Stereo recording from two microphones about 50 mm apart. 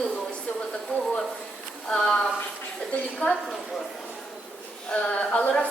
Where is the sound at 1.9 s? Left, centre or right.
Centre.